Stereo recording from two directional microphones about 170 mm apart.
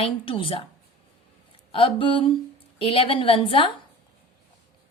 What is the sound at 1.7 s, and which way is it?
A woman's voice, 30° left (ahead or behind).